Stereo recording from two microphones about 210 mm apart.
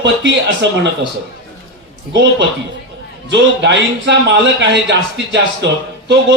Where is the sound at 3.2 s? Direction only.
55° right (ahead or behind).